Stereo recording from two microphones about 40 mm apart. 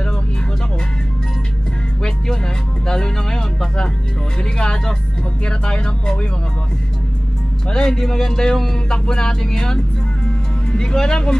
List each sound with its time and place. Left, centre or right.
2.9 s speech: centre
4.4 s music: centre
7.6 s speech: centre
10.7 s music: centre